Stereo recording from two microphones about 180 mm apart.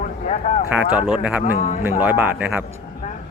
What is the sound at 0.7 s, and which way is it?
Speech, 10° right (ahead or behind).